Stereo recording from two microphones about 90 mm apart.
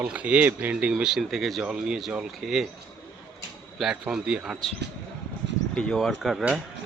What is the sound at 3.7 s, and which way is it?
Speech, 5° right (ahead or behind).